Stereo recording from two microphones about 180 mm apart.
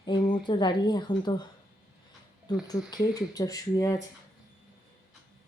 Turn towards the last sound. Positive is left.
turn(degrees=20)  # may be behind; listen again after turning